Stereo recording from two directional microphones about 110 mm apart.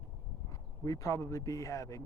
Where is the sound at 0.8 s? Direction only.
30° left (ahead or behind).